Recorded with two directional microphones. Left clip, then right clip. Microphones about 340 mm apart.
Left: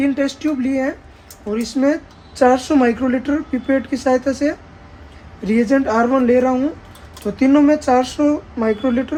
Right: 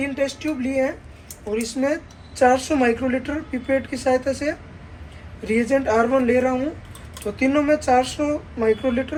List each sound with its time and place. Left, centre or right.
0.1 s a woman's voice: left